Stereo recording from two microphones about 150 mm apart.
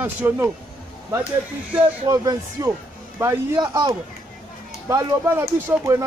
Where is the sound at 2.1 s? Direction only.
25° right (ahead or behind).